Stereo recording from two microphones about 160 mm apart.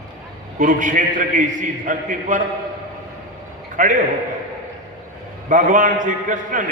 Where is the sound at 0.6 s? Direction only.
55° right (ahead or behind).